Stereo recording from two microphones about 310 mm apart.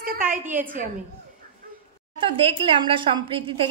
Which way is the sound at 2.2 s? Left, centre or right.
Centre.